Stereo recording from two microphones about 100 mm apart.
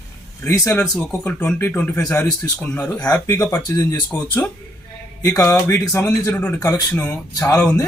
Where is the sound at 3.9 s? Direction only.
15° left (ahead or behind).